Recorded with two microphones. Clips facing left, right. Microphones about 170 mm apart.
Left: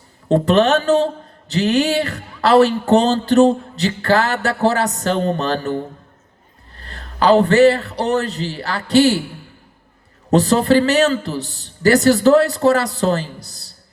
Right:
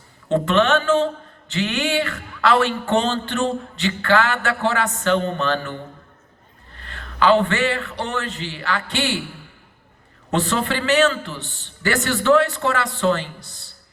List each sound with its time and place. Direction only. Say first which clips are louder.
0.3 s speech: left 4 dB; 35° left (ahead or behind)
10.3 s speech: left 9 dB; 40° left (ahead or behind)